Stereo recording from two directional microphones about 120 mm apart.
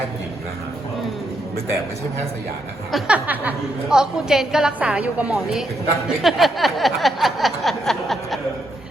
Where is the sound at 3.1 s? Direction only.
15° right (ahead or behind).